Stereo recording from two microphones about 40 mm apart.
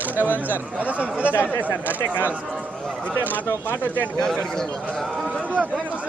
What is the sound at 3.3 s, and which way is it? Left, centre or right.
Speech, left.